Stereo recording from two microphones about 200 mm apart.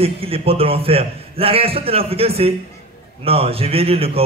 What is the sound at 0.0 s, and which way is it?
A man's voice, 30° right (ahead or behind).